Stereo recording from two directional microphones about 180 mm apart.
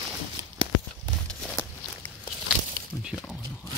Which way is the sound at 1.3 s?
Centre (ahead or behind).